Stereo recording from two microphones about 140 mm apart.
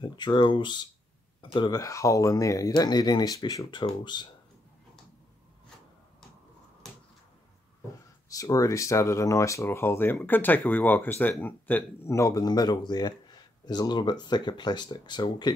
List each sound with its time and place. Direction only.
0.0 s speech: 35° left (ahead or behind)
8.3 s speech: 25° left (ahead or behind)